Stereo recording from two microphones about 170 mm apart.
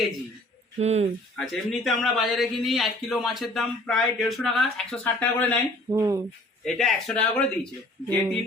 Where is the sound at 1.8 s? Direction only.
Centre (ahead or behind).